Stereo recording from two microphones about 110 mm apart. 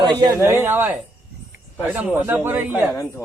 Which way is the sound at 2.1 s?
20° right (ahead or behind).